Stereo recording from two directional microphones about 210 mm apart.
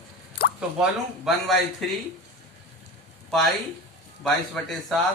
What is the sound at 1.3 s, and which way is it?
Speech, centre (ahead or behind).